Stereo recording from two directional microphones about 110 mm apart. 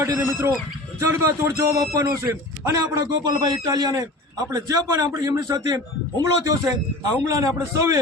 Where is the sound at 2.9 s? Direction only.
40° right (ahead or behind).